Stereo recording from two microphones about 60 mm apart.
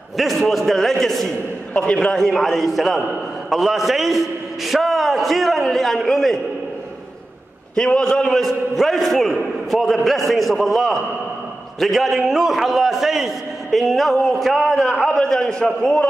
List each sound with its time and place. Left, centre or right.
0.2 s a man's voice: centre
1.8 s a man's voice: centre
2.1 s a man's voice: centre
7.7 s a man's voice: centre
15.0 s a man's voice: centre